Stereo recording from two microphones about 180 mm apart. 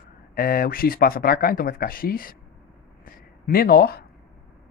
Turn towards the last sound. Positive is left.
turn(degrees=60)  # may be behind; listen again after turning